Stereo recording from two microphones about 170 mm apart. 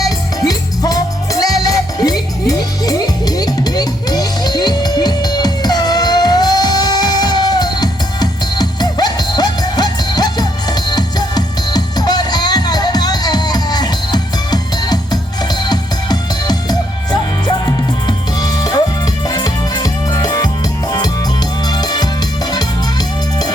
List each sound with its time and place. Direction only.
0.0 s music: 20° left (ahead or behind)
21.7 s music: 25° left (ahead or behind)